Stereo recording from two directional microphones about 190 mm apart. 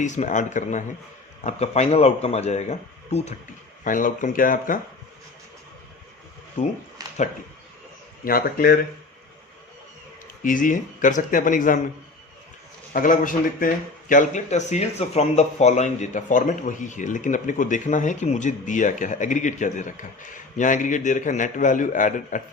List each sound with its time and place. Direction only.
0.0 s speech: 40° left (ahead or behind)
7.0 s a sound: 20° right (ahead or behind)
8.2 s speech: 50° left (ahead or behind)
10.4 s speech: 45° left (ahead or behind)
12.9 s speech: 45° left (ahead or behind)